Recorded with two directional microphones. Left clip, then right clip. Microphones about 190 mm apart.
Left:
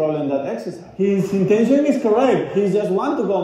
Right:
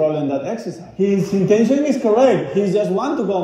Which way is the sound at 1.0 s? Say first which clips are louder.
Right 1 dB; 20° right (ahead or behind).